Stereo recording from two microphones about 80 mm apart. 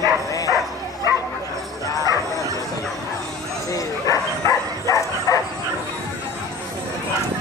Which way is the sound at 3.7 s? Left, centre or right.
Left.